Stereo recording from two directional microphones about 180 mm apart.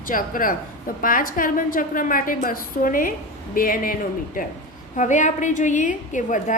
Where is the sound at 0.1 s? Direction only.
50° left (ahead or behind).